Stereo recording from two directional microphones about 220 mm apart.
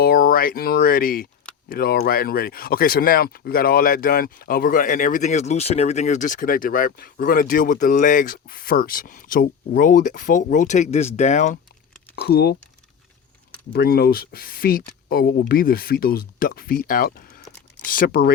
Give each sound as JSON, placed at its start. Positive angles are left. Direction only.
{"t": 0.0, "sound": "speech", "side_deg": 40}
{"t": 12.1, "sound": "speech", "side_deg": 45}
{"t": 13.7, "sound": "speech", "side_deg": 45}